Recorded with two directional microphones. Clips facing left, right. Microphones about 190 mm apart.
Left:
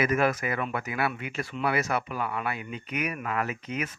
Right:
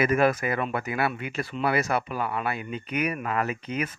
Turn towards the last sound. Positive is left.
turn(degrees=-35)  # may be behind; listen again after turning